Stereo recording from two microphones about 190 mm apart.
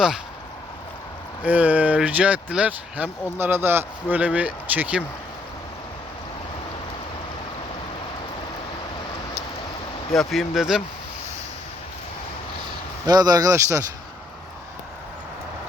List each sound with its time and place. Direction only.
1.4 s speech: 10° right (ahead or behind)
10.1 s speech: centre (ahead or behind)
13.1 s speech: 20° right (ahead or behind)